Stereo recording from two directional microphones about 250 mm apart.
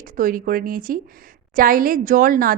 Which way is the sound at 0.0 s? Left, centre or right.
Right.